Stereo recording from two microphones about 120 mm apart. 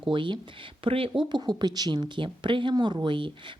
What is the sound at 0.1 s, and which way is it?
A woman's voice, 45° right (ahead or behind).